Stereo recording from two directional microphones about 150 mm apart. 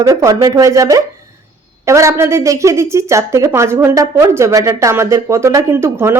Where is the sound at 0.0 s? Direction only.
20° right (ahead or behind).